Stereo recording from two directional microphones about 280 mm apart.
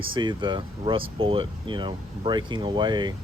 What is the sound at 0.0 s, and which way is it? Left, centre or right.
Speech, centre.